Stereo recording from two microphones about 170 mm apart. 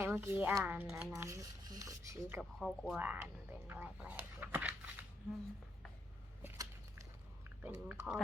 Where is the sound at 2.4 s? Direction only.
Centre (ahead or behind).